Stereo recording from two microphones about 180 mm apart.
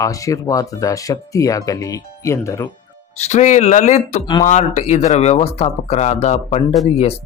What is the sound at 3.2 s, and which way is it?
Speech, 40° left (ahead or behind).